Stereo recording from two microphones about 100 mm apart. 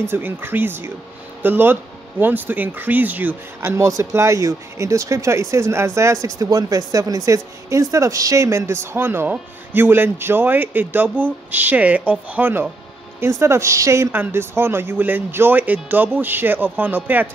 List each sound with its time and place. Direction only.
0.0 s speech: 20° right (ahead or behind)